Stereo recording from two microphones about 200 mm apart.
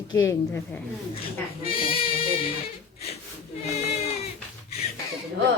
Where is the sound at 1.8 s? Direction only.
30° left (ahead or behind).